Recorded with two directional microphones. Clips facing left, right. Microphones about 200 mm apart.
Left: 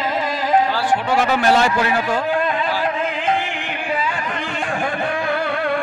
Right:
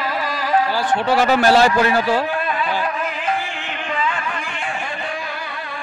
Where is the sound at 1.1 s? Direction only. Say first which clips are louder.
Right 3 dB; 35° right (ahead or behind).